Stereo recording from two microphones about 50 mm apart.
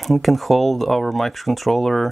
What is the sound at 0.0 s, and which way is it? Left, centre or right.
Speech, centre.